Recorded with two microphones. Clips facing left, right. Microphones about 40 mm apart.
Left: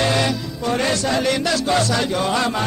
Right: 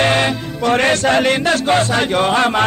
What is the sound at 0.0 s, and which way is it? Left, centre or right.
Music, right.